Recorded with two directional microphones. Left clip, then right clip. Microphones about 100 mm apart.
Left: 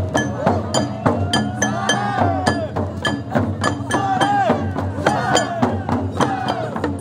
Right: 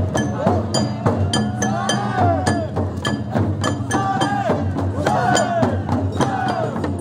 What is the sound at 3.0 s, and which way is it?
Music, 25° left (ahead or behind).